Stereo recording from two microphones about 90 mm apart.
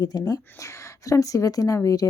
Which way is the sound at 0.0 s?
45° left (ahead or behind).